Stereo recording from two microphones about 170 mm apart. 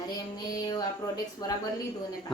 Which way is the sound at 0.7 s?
20° left (ahead or behind).